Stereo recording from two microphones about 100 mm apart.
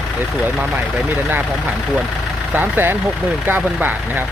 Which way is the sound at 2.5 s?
20° right (ahead or behind).